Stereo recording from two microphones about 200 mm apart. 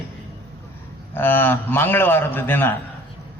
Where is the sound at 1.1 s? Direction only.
10° left (ahead or behind).